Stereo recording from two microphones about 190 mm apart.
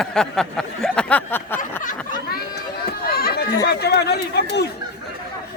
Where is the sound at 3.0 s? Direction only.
50° left (ahead or behind).